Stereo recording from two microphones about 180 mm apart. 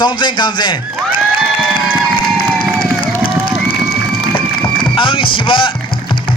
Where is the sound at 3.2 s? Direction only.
55° left (ahead or behind).